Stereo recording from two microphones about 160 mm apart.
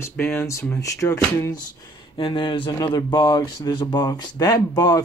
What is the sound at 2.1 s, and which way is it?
Speech, 30° left (ahead or behind).